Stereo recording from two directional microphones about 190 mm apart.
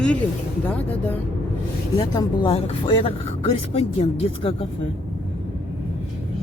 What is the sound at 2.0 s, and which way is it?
Speech, 25° left (ahead or behind).